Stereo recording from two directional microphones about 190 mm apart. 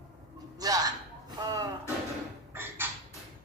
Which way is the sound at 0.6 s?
20° right (ahead or behind).